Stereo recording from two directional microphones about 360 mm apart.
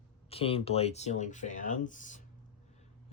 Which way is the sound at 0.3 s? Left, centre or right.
Centre.